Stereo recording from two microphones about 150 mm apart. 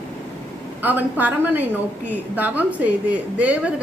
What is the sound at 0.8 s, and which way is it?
A woman's voice, 10° right (ahead or behind).